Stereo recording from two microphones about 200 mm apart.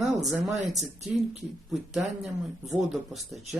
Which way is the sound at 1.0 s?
Centre (ahead or behind).